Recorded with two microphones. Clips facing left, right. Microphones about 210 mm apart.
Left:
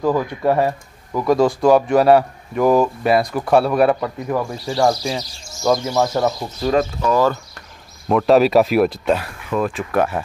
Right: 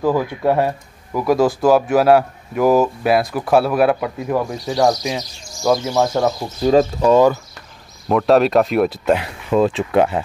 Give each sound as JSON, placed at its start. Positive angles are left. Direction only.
{"t": 0.0, "sound": "a man's voice", "side_deg": -5}
{"t": 6.6, "sound": "speech", "side_deg": -30}
{"t": 8.1, "sound": "a man's voice", "side_deg": 0}
{"t": 9.1, "sound": "speech", "side_deg": -20}